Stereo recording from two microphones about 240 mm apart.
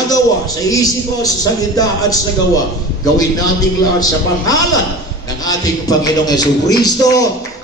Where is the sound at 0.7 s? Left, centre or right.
Centre.